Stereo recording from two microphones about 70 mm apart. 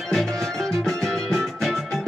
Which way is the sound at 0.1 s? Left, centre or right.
Centre.